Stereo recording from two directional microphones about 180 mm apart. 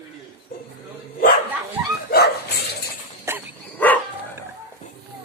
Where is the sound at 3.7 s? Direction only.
10° left (ahead or behind).